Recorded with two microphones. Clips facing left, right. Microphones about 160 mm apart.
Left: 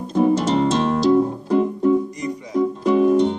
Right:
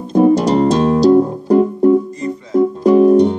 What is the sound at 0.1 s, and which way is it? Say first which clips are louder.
Music: right 6 dB; 40° right (ahead or behind).